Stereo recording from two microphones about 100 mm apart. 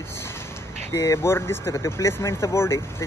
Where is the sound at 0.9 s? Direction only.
30° left (ahead or behind).